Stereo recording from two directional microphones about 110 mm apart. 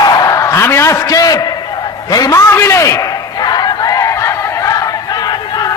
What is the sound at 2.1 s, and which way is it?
Speech, 35° left (ahead or behind).